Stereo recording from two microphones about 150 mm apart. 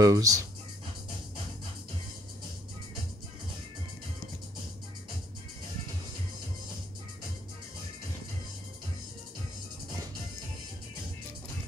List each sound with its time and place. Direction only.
0.0 s speech: 25° right (ahead or behind)